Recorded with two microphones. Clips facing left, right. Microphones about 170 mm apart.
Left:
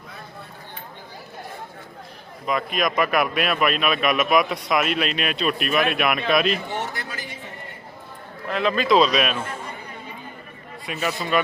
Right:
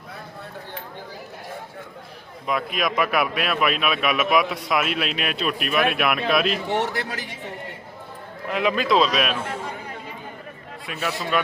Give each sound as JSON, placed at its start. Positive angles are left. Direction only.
{"t": 2.5, "sound": "a man's voice", "side_deg": -5}
{"t": 6.7, "sound": "a man's voice", "side_deg": -70}
{"t": 8.4, "sound": "a man's voice", "side_deg": -10}
{"t": 10.8, "sound": "a man's voice", "side_deg": 0}